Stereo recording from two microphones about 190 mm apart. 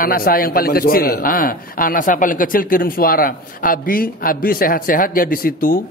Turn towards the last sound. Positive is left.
turn(degrees=50)  # may be behind; listen again after turning